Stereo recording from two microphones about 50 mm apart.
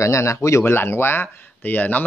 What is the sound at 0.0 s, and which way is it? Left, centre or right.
Speech, left.